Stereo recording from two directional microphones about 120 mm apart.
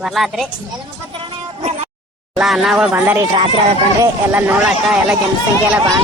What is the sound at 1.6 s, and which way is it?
Music, 60° right (ahead or behind).